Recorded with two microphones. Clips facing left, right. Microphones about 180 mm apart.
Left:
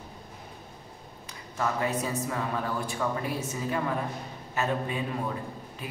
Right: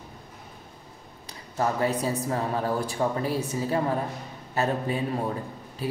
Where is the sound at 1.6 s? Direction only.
35° right (ahead or behind).